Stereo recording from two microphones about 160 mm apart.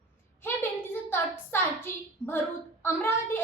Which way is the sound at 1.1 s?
15° left (ahead or behind).